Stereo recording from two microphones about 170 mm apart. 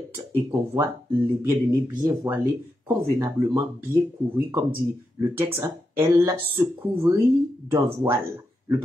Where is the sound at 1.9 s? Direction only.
25° right (ahead or behind).